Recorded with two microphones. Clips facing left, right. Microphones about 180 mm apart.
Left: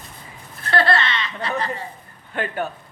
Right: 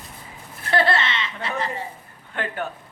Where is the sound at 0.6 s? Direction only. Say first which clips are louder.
Left 1 dB; 15° right (ahead or behind).